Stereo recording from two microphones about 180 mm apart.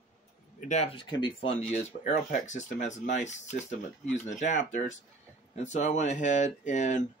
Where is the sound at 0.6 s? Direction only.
40° left (ahead or behind).